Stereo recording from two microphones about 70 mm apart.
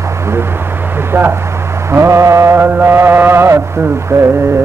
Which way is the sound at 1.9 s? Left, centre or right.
Right.